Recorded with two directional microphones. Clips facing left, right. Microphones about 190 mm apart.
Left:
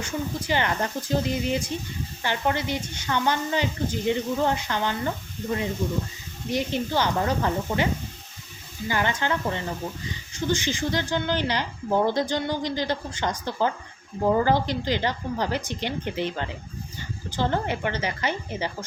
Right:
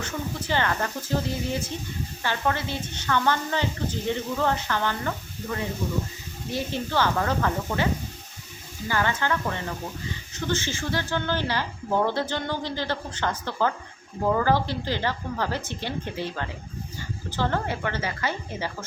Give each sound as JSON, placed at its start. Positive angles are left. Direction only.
{"t": 0.0, "sound": "speech", "side_deg": 15}
{"t": 8.9, "sound": "a woman's voice", "side_deg": 20}